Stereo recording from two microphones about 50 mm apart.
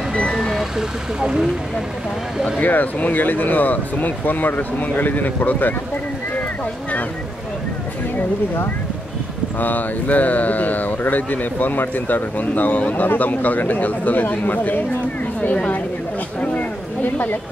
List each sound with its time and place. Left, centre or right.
0.1 s vehicle: centre
0.4 s vehicle: centre
2.6 s speech: left
9.6 s speech: left
15.5 s a woman's voice: left
16.3 s a sound: left